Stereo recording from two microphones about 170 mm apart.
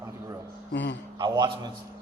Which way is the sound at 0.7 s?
90° left.